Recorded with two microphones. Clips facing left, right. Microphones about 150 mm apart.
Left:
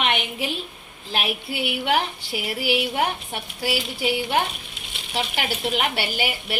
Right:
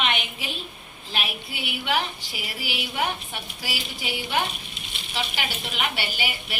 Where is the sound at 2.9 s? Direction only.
50° left (ahead or behind).